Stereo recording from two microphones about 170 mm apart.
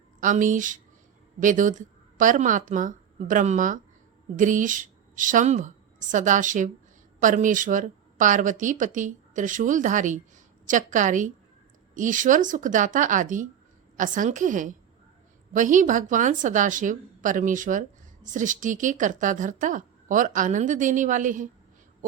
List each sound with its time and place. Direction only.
0.2 s a woman's voice: 50° right (ahead or behind)